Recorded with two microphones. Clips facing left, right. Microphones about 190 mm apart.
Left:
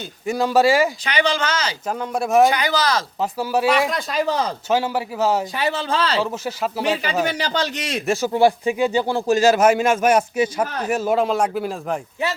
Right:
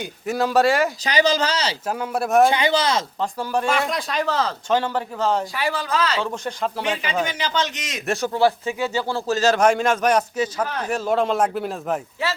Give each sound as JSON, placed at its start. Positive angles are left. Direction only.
{"t": 0.3, "sound": "speech", "side_deg": 0}
{"t": 1.0, "sound": "speech", "side_deg": -40}
{"t": 1.9, "sound": "speech", "side_deg": -5}
{"t": 2.5, "sound": "speech", "side_deg": -25}
{"t": 3.2, "sound": "speech", "side_deg": 5}
{"t": 4.3, "sound": "speech", "side_deg": 15}
{"t": 5.5, "sound": "speech", "side_deg": 25}
{"t": 6.2, "sound": "speech", "side_deg": 5}
{"t": 7.3, "sound": "a man's voice", "side_deg": 35}
{"t": 8.0, "sound": "speech", "side_deg": 0}
{"t": 8.3, "sound": "speech", "side_deg": 15}